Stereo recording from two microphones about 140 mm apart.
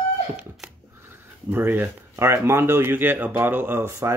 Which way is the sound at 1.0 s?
15° right (ahead or behind).